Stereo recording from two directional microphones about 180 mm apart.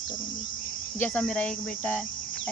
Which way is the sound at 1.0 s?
10° left (ahead or behind).